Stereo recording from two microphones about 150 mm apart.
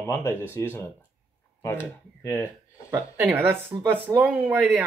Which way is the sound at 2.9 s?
15° right (ahead or behind).